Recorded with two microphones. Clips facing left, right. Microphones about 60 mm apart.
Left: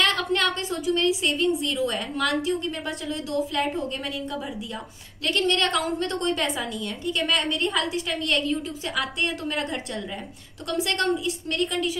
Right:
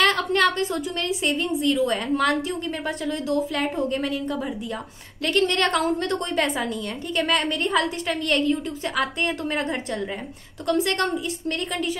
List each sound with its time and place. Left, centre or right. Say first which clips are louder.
0.0 s a sound: right 3 dB; right
1.3 s a woman's voice: right 2 dB; right
5.2 s a woman's voice: right 2 dB; right